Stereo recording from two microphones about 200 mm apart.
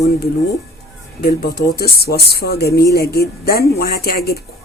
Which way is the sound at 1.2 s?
50° left (ahead or behind).